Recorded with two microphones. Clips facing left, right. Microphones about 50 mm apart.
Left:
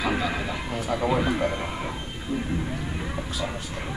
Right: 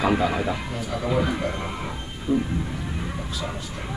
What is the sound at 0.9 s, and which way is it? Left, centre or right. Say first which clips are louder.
Music: even; centre.